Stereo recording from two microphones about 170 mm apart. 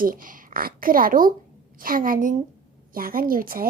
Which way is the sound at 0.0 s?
55° right (ahead or behind).